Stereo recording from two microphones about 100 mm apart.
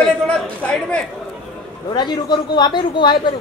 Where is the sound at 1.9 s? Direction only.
45° left (ahead or behind).